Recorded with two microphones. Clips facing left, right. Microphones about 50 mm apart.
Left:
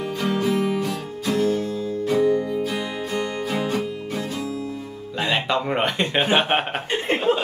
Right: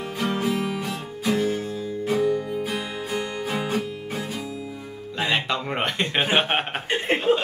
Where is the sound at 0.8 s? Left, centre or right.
Centre.